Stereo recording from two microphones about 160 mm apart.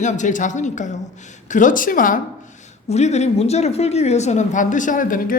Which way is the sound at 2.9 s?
45° left (ahead or behind).